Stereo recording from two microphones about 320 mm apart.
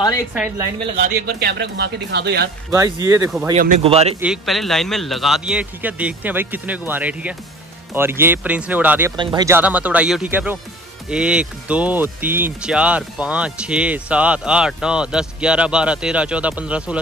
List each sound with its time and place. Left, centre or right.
0.3 s speech: centre
0.9 s speech: right
2.7 s speech: centre
3.8 s speech: centre
4.2 s speech: centre